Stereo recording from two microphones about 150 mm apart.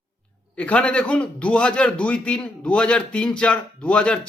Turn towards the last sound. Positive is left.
turn(degrees=5)  # may be behind; listen again after turning